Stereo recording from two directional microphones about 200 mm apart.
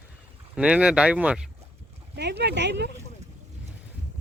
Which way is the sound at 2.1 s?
55° right (ahead or behind).